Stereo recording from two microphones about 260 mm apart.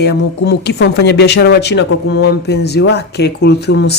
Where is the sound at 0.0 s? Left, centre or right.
Left.